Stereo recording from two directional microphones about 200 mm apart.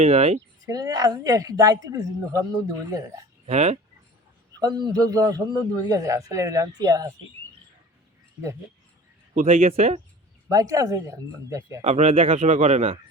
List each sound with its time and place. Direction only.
0.0 s speech: 30° right (ahead or behind)
0.6 s a man's voice: 20° right (ahead or behind)
3.4 s speech: 35° right (ahead or behind)
4.6 s a man's voice: 20° right (ahead or behind)
9.3 s speech: 40° right (ahead or behind)
10.5 s speech: 15° right (ahead or behind)
11.8 s speech: 35° right (ahead or behind)